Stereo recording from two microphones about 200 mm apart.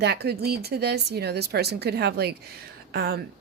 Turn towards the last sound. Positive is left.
turn(degrees=-50)  # may be behind; listen again after turning